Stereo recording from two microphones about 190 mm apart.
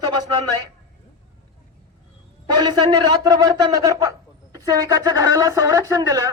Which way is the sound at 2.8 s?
20° right (ahead or behind).